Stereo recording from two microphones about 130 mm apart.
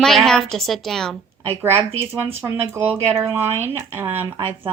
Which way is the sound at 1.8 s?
50° right (ahead or behind).